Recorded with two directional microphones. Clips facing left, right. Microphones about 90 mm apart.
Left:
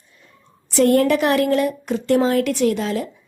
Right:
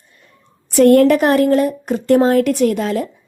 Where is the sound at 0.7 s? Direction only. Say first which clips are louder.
Right 6 dB; 55° right (ahead or behind).